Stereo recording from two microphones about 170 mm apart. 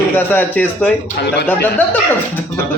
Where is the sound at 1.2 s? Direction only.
75° left (ahead or behind).